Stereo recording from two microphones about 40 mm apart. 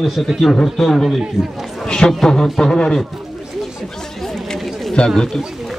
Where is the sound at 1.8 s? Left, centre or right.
Centre.